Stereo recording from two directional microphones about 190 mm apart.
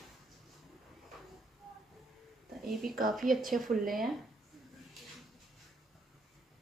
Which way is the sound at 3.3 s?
45° right (ahead or behind).